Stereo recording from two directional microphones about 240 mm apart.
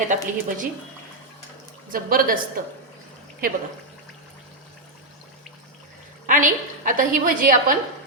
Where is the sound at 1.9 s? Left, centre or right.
Right.